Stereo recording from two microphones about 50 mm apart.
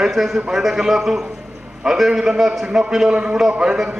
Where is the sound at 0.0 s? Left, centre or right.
Centre.